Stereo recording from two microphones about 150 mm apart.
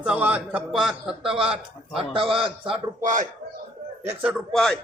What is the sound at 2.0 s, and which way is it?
Speech, 35° right (ahead or behind).